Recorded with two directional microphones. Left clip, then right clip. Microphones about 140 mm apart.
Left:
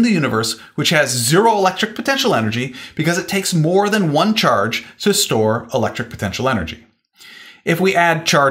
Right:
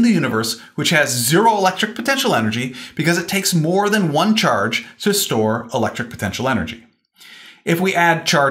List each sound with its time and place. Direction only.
0.0 s speech: 45° left (ahead or behind); by 8.5 s 60° left (ahead or behind)